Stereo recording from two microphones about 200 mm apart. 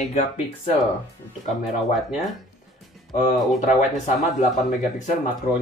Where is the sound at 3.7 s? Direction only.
40° left (ahead or behind).